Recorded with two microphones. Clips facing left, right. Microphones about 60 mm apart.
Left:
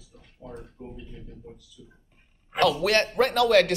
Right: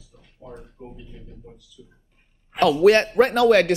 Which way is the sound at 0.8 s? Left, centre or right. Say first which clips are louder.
Even; centre.